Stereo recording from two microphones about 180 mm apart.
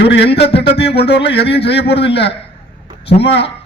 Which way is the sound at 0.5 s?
65° left (ahead or behind).